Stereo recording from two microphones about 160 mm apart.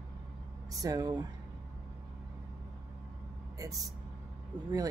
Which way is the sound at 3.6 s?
20° right (ahead or behind).